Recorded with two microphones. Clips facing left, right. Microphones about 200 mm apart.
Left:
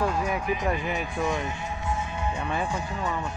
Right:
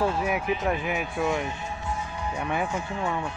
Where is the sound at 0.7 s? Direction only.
Centre (ahead or behind).